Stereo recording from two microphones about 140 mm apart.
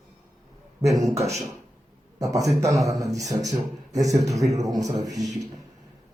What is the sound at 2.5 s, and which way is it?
Speech, 50° right (ahead or behind).